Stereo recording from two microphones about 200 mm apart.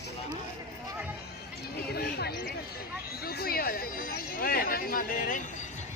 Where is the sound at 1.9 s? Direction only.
50° left (ahead or behind).